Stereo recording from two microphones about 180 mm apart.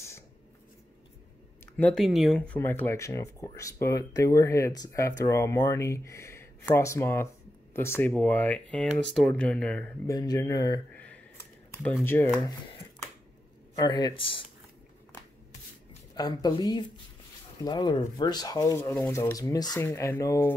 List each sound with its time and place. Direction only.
1.8 s speech: 5° left (ahead or behind)
10.0 s speech: 20° left (ahead or behind)
11.0 s a sound: 10° left (ahead or behind)
12.0 s speech: 10° left (ahead or behind)
13.7 s speech: 20° left (ahead or behind)
16.2 s speech: 20° left (ahead or behind)